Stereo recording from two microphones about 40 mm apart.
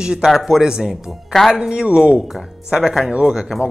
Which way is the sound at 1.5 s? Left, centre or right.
Right.